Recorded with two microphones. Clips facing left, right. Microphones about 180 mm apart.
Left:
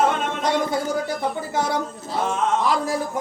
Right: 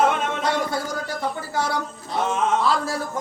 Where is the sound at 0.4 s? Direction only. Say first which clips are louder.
Left 5 dB; 20° left (ahead or behind).